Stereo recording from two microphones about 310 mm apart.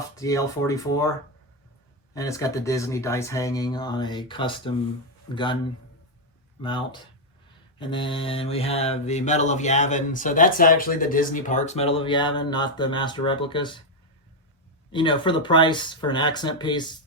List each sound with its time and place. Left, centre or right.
0.2 s speech: centre
2.1 s speech: centre
6.6 s speech: centre
7.8 s mantra: centre
14.9 s speech: centre